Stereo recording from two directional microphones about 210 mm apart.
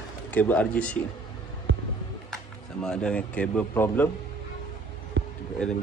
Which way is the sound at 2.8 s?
5° left (ahead or behind).